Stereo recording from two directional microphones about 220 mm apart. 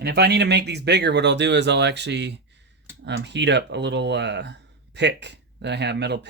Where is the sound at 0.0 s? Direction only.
50° right (ahead or behind).